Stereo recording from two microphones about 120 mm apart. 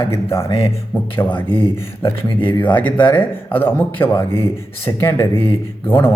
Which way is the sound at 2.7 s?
15° left (ahead or behind).